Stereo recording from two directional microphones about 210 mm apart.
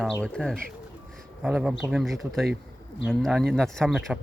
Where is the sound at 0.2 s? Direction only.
5° left (ahead or behind).